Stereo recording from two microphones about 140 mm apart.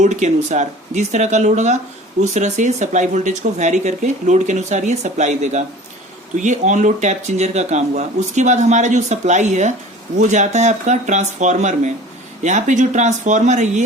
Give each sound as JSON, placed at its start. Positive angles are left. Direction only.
{"t": 0.0, "sound": "speech", "side_deg": -60}